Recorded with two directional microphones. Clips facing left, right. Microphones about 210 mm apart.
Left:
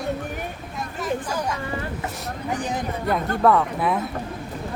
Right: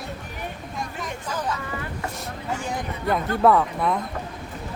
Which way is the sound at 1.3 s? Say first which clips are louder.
Left 2 dB; 10° left (ahead or behind).